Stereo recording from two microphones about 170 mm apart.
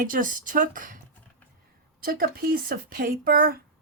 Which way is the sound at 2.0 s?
60° right (ahead or behind).